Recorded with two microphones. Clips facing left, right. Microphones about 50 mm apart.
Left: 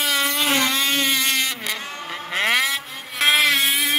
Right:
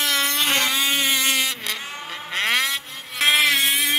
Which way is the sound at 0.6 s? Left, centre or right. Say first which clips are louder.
Left 1 dB; centre.